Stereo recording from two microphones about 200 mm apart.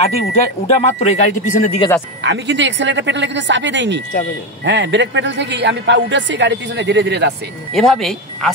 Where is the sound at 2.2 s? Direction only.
65° right (ahead or behind).